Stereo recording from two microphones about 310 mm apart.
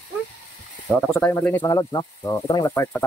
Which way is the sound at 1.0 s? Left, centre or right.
Centre.